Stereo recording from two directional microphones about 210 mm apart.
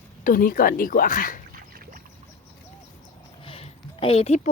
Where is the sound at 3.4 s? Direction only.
25° left (ahead or behind).